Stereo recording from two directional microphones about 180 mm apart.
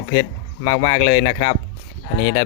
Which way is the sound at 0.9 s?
90° left.